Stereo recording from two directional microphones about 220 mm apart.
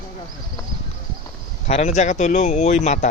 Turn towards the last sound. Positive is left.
turn(degrees=35)  # may be behind; listen again after turning